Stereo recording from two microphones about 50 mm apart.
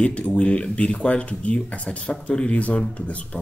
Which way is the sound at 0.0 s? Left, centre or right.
Left.